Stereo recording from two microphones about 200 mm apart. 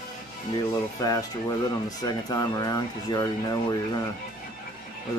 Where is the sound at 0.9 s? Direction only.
20° left (ahead or behind).